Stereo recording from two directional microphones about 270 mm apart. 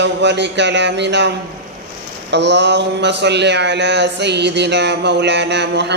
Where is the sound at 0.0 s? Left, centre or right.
Right.